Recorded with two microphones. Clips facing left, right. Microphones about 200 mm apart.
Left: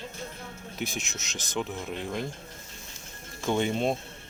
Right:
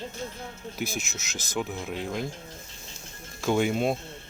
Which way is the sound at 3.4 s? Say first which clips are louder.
Right 2 dB; 5° right (ahead or behind).